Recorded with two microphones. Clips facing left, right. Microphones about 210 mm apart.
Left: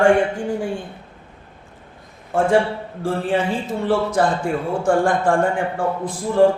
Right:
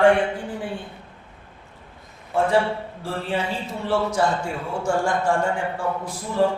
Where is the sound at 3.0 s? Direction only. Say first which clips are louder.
Left 7 dB; 50° left (ahead or behind).